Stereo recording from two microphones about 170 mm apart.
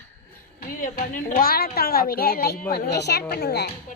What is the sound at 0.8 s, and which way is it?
A woman's voice, 55° left (ahead or behind).